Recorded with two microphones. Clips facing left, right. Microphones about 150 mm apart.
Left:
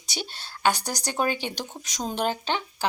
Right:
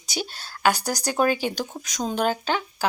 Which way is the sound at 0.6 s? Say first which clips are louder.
Right 2 dB; 20° left (ahead or behind).